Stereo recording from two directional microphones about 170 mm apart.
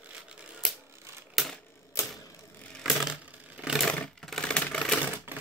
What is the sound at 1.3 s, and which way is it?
Camera, centre (ahead or behind).